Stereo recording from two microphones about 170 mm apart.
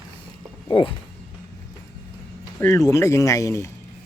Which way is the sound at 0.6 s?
30° left (ahead or behind).